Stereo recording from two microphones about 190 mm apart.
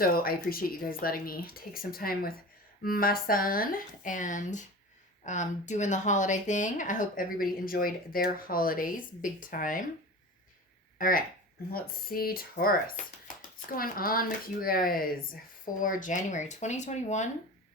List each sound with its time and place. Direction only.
0.0 s a woman's voice: 50° left (ahead or behind)
10.9 s a woman's voice: 50° left (ahead or behind)